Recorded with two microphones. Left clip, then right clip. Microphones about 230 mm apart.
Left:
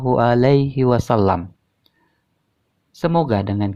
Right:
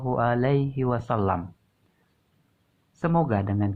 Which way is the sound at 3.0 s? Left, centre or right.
Left.